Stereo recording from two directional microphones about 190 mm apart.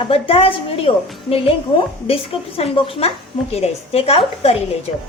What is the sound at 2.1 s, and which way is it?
A woman's voice, 30° left (ahead or behind).